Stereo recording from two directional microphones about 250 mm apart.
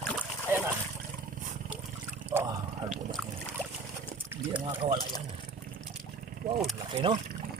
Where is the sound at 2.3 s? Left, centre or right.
Centre.